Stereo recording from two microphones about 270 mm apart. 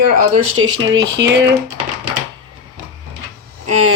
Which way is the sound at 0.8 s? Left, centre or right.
Right.